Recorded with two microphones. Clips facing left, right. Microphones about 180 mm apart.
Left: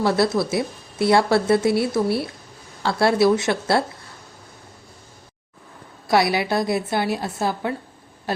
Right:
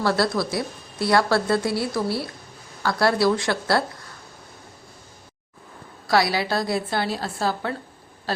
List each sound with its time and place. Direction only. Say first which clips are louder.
0.0 s speech: left 3 dB; 20° left (ahead or behind)
6.1 s speech: left 2 dB; 20° left (ahead or behind)